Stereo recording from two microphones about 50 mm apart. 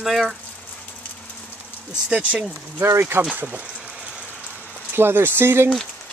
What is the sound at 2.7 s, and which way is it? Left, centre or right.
Speech, right.